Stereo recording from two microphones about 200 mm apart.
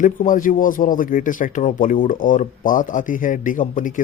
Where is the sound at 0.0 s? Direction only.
40° left (ahead or behind).